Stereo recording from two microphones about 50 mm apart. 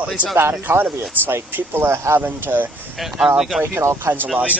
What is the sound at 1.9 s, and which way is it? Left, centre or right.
Speech, right.